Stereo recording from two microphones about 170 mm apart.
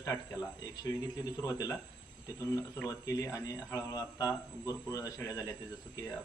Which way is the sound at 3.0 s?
20° left (ahead or behind).